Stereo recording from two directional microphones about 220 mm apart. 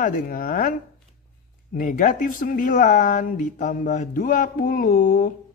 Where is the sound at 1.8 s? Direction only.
35° left (ahead or behind).